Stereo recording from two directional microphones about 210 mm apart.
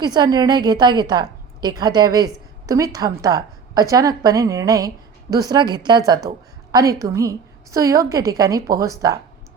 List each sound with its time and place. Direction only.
0.0 s a woman's voice: 20° right (ahead or behind)